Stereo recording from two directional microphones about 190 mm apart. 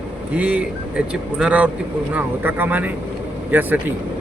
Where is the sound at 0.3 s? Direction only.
5° right (ahead or behind).